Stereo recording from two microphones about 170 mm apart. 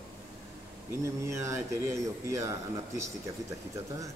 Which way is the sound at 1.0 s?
15° right (ahead or behind).